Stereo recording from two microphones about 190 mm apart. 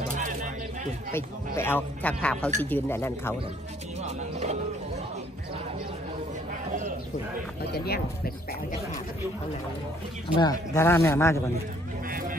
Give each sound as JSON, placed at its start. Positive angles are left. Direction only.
{"t": 0.1, "sound": "bird", "side_deg": -45}
{"t": 1.1, "sound": "speech", "side_deg": 10}
{"t": 4.0, "sound": "speech", "side_deg": -35}
{"t": 7.7, "sound": "speech", "side_deg": 55}
{"t": 10.3, "sound": "speech", "side_deg": 20}
{"t": 12.1, "sound": "vehicle", "side_deg": -45}